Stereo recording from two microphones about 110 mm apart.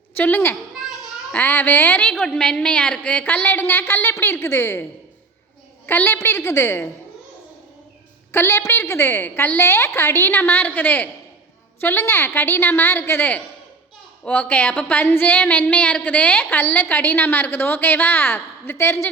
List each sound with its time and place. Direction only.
0.2 s a woman's voice: 20° left (ahead or behind)
8.3 s a woman's voice: 20° left (ahead or behind)